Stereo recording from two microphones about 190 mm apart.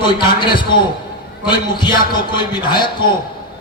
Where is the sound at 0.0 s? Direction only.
25° left (ahead or behind).